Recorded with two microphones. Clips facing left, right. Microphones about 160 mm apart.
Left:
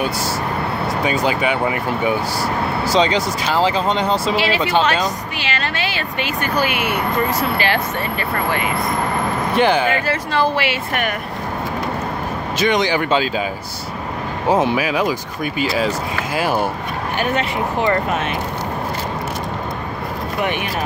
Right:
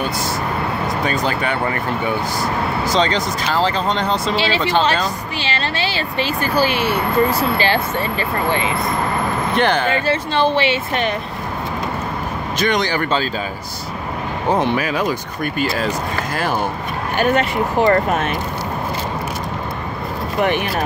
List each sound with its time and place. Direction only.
1.0 s speech: 10° left (ahead or behind)
4.4 s speech: 30° right (ahead or behind)
9.6 s speech: 10° left (ahead or behind)
9.9 s speech: 25° right (ahead or behind)
12.5 s speech: 5° left (ahead or behind)
14.5 s speech: 5° left (ahead or behind)
17.2 s speech: 45° right (ahead or behind)